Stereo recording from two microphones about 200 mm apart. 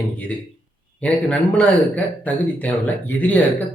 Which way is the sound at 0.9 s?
5° left (ahead or behind).